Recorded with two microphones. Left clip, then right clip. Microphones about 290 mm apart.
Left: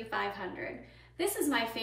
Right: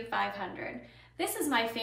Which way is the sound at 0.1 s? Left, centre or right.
Centre.